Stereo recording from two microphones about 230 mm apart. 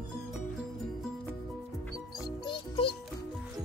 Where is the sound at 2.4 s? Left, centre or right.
Left.